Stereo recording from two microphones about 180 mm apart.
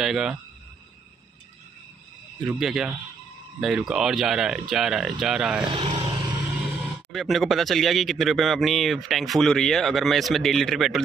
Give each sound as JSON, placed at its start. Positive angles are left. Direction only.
{"t": 0.0, "sound": "speech", "side_deg": -5}
{"t": 2.4, "sound": "speech", "side_deg": 0}
{"t": 5.7, "sound": "vehicle", "side_deg": -30}
{"t": 7.1, "sound": "speech", "side_deg": 0}